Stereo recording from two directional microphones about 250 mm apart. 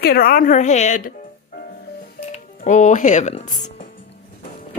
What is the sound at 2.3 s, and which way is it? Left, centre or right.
Speech, left.